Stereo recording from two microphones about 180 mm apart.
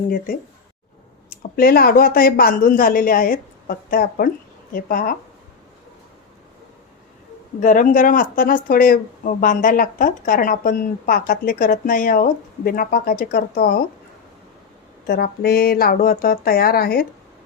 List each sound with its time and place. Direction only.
1.4 s speech: 55° left (ahead or behind)
7.6 s speech: 45° left (ahead or behind)
15.0 s speech: 60° left (ahead or behind)